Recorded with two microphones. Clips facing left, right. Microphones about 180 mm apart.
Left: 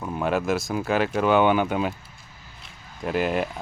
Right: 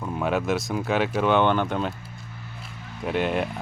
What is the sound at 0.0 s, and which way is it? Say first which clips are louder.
Speech: left 1 dB; centre (ahead or behind).